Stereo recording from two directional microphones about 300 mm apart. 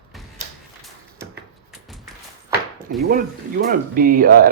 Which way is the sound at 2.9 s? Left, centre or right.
Right.